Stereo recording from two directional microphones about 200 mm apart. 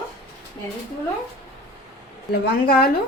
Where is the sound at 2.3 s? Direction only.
50° left (ahead or behind).